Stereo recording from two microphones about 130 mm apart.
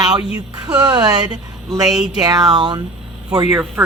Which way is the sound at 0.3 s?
30° right (ahead or behind).